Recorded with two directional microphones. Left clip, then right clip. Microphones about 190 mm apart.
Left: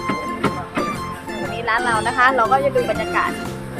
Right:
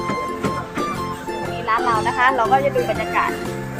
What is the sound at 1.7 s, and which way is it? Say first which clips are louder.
Music: even; 25° left (ahead or behind).